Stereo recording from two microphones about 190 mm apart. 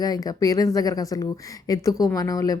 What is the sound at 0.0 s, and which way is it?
A woman's voice, 20° left (ahead or behind).